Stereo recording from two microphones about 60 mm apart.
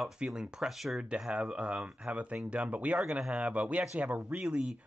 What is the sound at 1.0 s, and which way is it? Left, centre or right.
Speech, centre.